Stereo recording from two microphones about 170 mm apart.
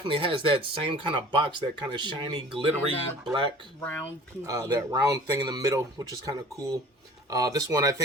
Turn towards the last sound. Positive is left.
turn(degrees=-20)  # may be behind; listen again after turning